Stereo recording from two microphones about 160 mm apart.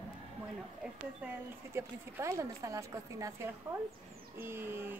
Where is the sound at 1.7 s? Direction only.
15° right (ahead or behind).